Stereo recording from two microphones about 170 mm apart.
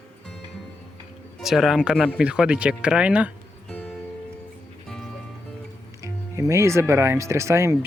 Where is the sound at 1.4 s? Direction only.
Centre (ahead or behind).